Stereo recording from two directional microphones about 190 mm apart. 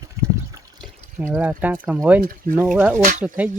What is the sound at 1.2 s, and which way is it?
Speech, 10° right (ahead or behind).